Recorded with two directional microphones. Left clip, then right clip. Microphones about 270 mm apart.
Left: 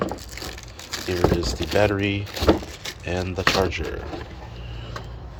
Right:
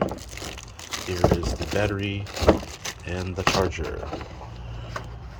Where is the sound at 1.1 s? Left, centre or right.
Centre.